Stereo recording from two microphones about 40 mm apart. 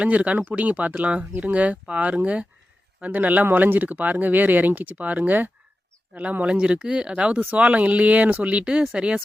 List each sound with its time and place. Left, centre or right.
0.0 s speech: right
3.4 s speech: right
6.4 s speech: right